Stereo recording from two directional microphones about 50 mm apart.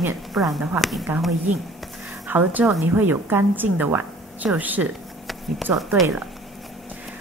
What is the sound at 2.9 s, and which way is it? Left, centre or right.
A woman's voice, right.